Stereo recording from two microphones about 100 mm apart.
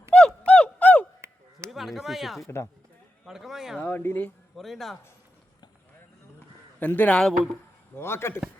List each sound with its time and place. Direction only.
0.1 s music: 10° left (ahead or behind)
1.2 s a sound: 30° right (ahead or behind)
1.7 s speech: centre (ahead or behind)
3.8 s speech: 20° left (ahead or behind)
4.5 s speech: centre (ahead or behind)
6.7 s speech: 15° left (ahead or behind)
7.9 s speech: 25° left (ahead or behind)